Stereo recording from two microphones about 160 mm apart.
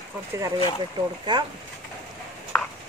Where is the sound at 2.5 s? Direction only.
10° left (ahead or behind).